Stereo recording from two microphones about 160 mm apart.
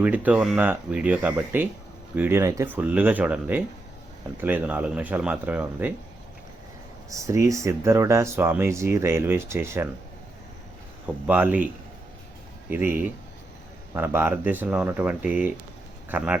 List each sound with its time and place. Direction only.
0.0 s speech: 10° right (ahead or behind)
7.1 s speech: 20° right (ahead or behind)
11.1 s speech: 10° right (ahead or behind)
12.7 s speech: 10° right (ahead or behind)